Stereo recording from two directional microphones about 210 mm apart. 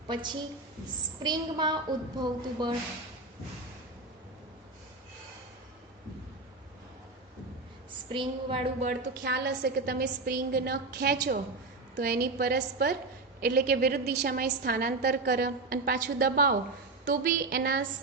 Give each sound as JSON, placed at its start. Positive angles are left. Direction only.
{"t": 1.2, "sound": "a woman's voice", "side_deg": -20}
{"t": 8.1, "sound": "a woman's voice", "side_deg": -25}
{"t": 9.2, "sound": "a woman's voice", "side_deg": -55}